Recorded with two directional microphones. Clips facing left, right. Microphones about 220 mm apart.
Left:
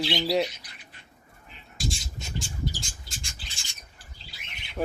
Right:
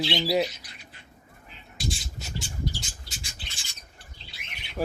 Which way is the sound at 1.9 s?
Centre (ahead or behind).